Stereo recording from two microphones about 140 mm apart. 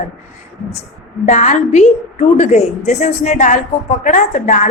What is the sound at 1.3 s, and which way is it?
A woman's voice, 60° left (ahead or behind).